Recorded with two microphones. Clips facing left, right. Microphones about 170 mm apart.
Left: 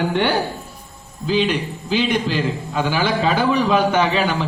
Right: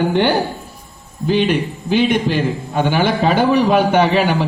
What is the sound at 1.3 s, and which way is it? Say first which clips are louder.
A man's voice: right 3 dB; 60° right (ahead or behind).